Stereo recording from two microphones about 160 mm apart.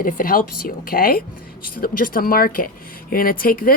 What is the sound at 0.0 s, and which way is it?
Speech, 60° left (ahead or behind).